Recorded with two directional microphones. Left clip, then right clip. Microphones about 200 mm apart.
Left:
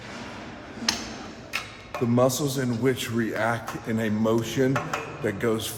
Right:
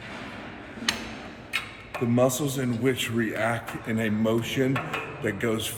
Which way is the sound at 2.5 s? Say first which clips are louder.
Left 1 dB; 5° left (ahead or behind).